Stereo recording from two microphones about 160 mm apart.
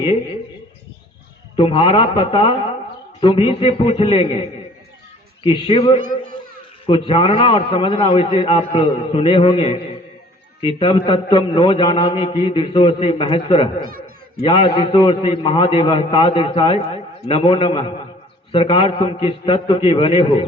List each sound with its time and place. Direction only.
1.5 s a man's voice: 35° left (ahead or behind)
13.7 s speech: 65° right (ahead or behind)
14.4 s a man's voice: 30° left (ahead or behind)